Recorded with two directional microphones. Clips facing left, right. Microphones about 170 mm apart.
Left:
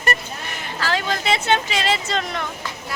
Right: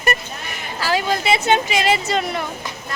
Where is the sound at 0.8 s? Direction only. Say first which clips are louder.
Right 3 dB; 10° right (ahead or behind).